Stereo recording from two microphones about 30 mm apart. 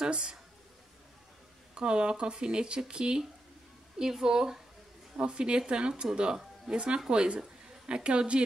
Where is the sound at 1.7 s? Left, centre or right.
Right.